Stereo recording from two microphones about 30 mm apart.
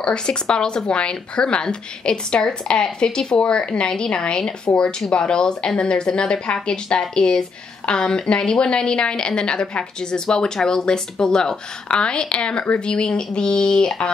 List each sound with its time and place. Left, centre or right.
0.0 s a woman's voice: left